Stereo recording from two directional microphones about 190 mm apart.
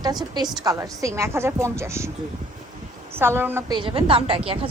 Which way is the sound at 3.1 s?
10° right (ahead or behind).